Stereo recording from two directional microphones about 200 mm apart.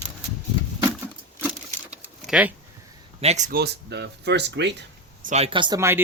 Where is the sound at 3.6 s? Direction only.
55° right (ahead or behind).